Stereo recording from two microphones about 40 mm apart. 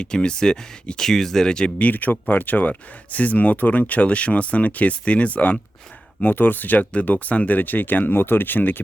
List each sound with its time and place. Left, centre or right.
0.0 s speech: left
1.5 s speech: left
1.8 s speech: left
6.2 s speech: left